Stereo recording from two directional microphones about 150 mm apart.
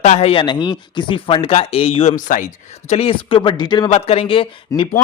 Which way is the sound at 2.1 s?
60° left (ahead or behind).